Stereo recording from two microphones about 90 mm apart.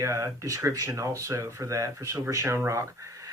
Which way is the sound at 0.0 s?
35° right (ahead or behind).